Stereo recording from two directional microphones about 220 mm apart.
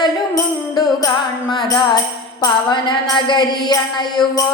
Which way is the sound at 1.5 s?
20° left (ahead or behind).